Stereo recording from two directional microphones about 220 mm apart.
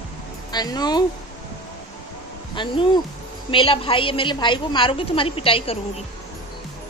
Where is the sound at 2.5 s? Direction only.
20° left (ahead or behind).